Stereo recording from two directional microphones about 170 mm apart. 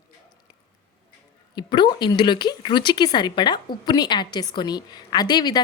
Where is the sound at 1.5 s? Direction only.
25° left (ahead or behind).